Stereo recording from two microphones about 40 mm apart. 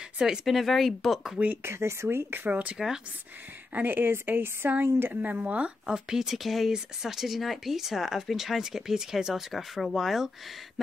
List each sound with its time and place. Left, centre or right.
0.5 s speech: centre
1.6 s speech: right
2.3 s speech: right
3.7 s a woman's voice: right
5.1 s speech: right
5.4 s speech: right
5.9 s speech: centre
6.7 s speech: centre
9.5 s speech: centre